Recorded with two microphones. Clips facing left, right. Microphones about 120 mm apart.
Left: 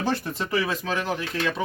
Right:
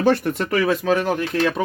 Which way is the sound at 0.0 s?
60° right (ahead or behind).